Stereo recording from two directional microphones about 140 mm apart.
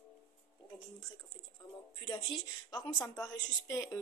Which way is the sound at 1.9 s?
35° left (ahead or behind).